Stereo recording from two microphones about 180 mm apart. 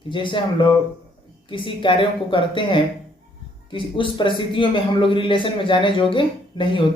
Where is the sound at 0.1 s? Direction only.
25° left (ahead or behind).